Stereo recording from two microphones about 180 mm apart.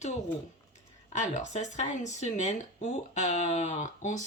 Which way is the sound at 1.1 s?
40° left (ahead or behind).